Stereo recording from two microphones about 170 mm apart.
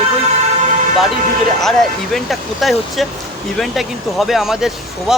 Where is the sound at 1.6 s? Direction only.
Centre (ahead or behind).